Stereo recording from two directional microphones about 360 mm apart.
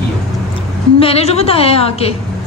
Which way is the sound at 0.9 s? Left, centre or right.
Centre.